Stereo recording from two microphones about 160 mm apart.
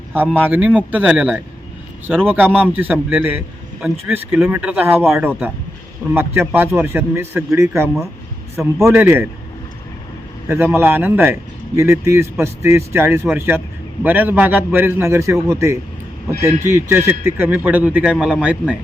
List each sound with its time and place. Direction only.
0.1 s a man's voice: 10° right (ahead or behind)
6.1 s a man's voice: 15° right (ahead or behind)
10.5 s a man's voice: 15° right (ahead or behind)